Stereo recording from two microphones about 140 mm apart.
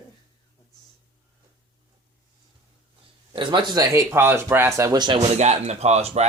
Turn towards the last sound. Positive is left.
turn(degrees=-50)  # may be behind; listen again after turning